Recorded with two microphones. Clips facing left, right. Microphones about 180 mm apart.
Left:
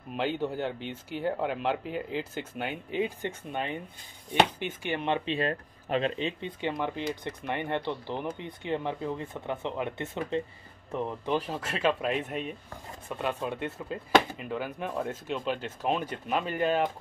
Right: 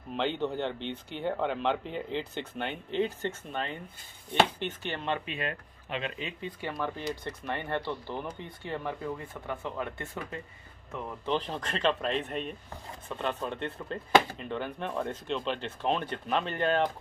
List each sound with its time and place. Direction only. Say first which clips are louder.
0.1 s speech: even; 5° left (ahead or behind); by 10.4 s 20° left (ahead or behind)
11.2 s speech: right 3 dB; 10° left (ahead or behind)